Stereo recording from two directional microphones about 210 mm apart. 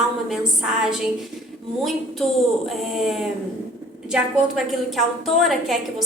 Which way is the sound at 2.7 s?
Centre (ahead or behind).